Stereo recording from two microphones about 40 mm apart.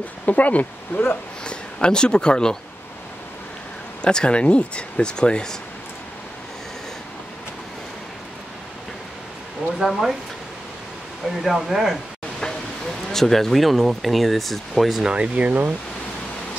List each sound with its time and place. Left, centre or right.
0.2 s speech: left
1.4 s speech: left
4.0 s speech: left
9.8 s speech: centre
11.4 s speech: centre
13.1 s speech: centre
15.3 s speech: right